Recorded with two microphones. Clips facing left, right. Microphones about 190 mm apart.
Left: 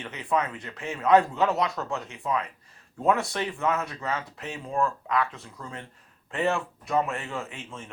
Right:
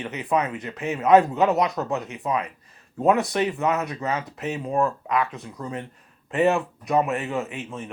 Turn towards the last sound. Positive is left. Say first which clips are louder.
# right 7 dB
turn(degrees=-20)  # may be behind; listen again after turning